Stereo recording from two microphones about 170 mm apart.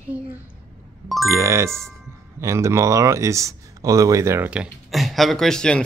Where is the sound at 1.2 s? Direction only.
15° right (ahead or behind).